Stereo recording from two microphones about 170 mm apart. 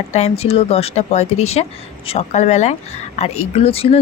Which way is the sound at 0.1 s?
40° left (ahead or behind).